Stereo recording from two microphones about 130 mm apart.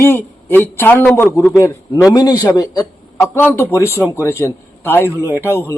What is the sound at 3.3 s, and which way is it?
A man's voice, 20° left (ahead or behind).